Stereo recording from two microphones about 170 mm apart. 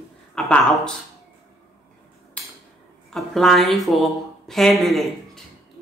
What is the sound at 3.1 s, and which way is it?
Speech, centre (ahead or behind).